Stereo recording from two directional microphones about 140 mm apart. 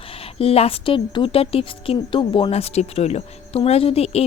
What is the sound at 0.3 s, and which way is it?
Speech, 45° left (ahead or behind).